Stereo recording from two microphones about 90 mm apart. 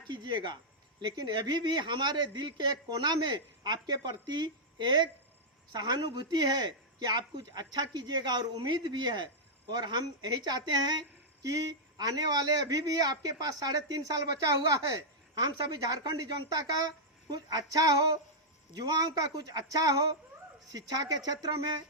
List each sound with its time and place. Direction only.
0.1 s a man's voice: 55° right (ahead or behind)